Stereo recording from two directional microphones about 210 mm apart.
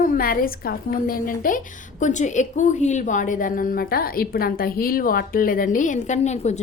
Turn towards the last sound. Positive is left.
turn(degrees=35)  # may be behind; listen again after turning